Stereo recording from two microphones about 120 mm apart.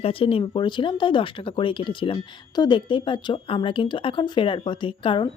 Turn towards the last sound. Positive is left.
turn(degrees=45)  # may be behind; listen again after turning